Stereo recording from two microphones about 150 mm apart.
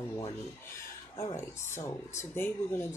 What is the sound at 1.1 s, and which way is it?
Speech, 20° left (ahead or behind).